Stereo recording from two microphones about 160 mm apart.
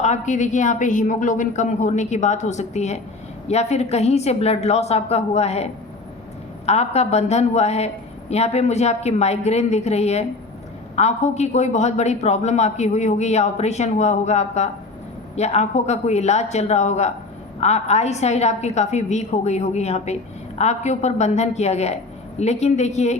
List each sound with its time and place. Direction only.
0.0 s a man's voice: 50° left (ahead or behind)